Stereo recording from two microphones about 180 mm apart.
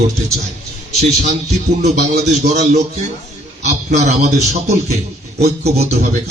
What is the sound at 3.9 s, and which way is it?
A man's voice, 40° right (ahead or behind).